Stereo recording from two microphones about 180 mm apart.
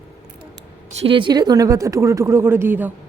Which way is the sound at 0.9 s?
30° right (ahead or behind).